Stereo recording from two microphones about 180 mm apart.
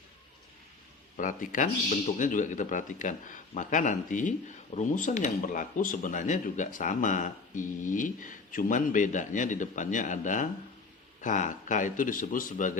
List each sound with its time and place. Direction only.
1.1 s speech: 45° left (ahead or behind)